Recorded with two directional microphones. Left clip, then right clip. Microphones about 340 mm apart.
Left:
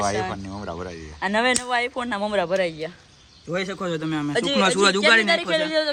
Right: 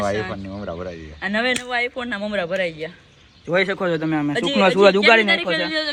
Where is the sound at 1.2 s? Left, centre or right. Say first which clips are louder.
Even; left.